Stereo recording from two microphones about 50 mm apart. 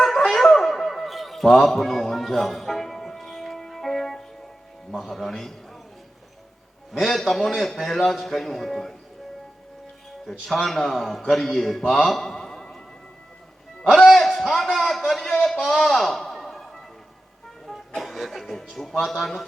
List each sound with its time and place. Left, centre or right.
0.3 s music: centre
4.9 s a man's voice: centre
6.9 s a man's voice: centre
10.2 s a man's voice: centre
11.9 s a sound: centre
14.2 s a sound: centre
17.7 s a man's voice: centre